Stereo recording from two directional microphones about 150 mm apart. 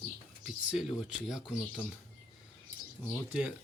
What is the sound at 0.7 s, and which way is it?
Speech, 5° right (ahead or behind).